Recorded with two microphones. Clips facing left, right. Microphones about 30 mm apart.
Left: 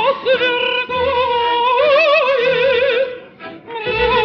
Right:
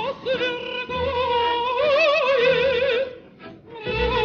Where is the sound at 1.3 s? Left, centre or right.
Centre.